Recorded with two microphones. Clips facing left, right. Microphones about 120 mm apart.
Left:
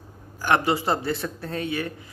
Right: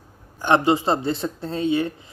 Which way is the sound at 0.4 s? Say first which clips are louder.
Right 4 dB; 20° right (ahead or behind).